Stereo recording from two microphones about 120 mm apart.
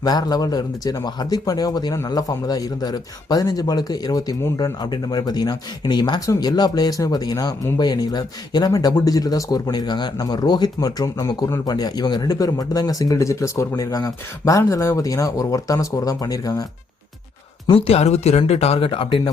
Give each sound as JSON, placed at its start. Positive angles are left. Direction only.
{"t": 0.0, "sound": "speech", "side_deg": 35}
{"t": 17.7, "sound": "speech", "side_deg": 55}